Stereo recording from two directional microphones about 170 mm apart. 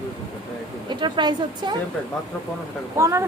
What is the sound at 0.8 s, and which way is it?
Speech, 25° right (ahead or behind).